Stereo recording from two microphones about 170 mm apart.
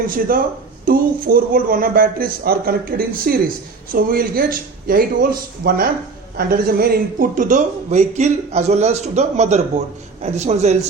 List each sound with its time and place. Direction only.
0.1 s a man's voice: 55° right (ahead or behind); by 10.8 s 40° right (ahead or behind)